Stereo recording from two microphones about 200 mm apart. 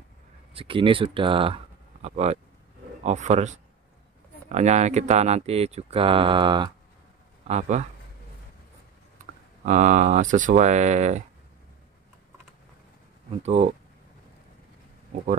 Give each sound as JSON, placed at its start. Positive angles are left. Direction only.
{"t": 0.6, "sound": "speech", "side_deg": -25}
{"t": 7.4, "sound": "speech", "side_deg": -35}
{"t": 9.2, "sound": "speech", "side_deg": -40}
{"t": 13.4, "sound": "speech", "side_deg": -30}